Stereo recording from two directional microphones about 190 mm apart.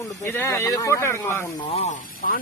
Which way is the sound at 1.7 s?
35° left (ahead or behind).